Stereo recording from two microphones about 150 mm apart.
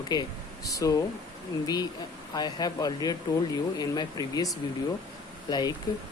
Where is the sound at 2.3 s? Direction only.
25° left (ahead or behind).